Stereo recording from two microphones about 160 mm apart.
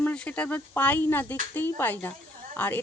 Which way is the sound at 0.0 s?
10° left (ahead or behind).